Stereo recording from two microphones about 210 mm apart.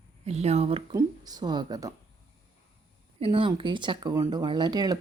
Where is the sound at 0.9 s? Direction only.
20° right (ahead or behind).